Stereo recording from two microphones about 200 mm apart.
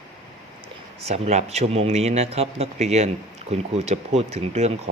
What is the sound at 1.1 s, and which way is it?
Speech, 30° right (ahead or behind).